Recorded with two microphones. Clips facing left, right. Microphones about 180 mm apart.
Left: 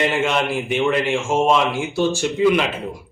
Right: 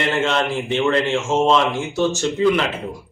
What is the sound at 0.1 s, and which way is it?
Speech, 10° left (ahead or behind).